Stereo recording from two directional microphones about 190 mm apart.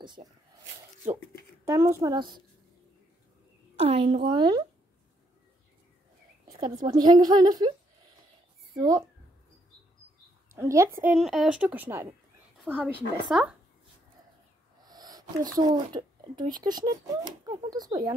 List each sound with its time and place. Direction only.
0.0 s speech: 25° right (ahead or behind)
1.7 s speech: 15° right (ahead or behind)
3.7 s a woman's voice: 30° right (ahead or behind)
6.5 s speech: 20° right (ahead or behind)
8.7 s a child's voice: 20° right (ahead or behind)
10.5 s speech: 15° right (ahead or behind)
11.1 s speech: centre (ahead or behind)
14.8 s a sound: 20° right (ahead or behind)
16.5 s speech: 20° right (ahead or behind)